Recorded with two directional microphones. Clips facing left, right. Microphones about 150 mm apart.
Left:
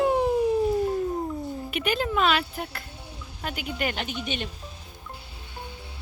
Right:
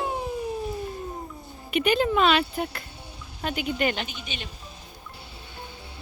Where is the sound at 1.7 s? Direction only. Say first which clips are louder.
Right 6 dB; 5° left (ahead or behind).